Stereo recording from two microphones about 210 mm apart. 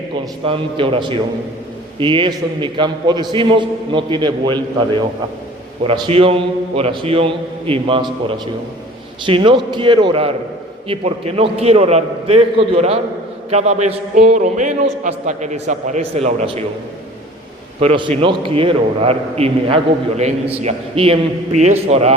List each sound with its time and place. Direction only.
0.4 s a man's voice: 25° right (ahead or behind)
5.8 s a man's voice: 25° right (ahead or behind)
9.2 s a man's voice: 25° right (ahead or behind)
17.7 s a man's voice: 25° right (ahead or behind)